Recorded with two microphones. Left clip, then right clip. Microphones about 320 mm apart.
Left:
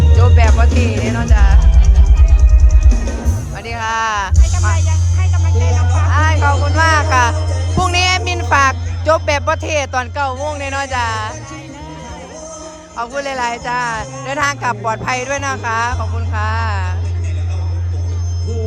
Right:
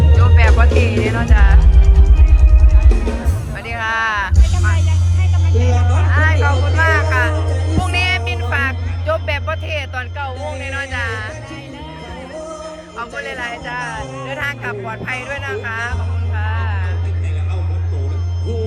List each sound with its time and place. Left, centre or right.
0.2 s music: centre
3.5 s music: centre
5.5 s music: centre
6.1 s music: centre
13.0 s speech: centre